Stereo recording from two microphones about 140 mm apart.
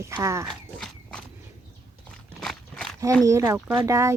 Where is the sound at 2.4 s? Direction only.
5° left (ahead or behind).